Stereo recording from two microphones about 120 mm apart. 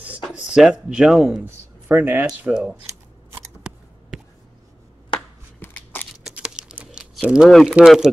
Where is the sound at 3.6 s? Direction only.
5° right (ahead or behind).